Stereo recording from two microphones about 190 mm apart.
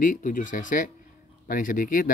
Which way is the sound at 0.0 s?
45° left (ahead or behind).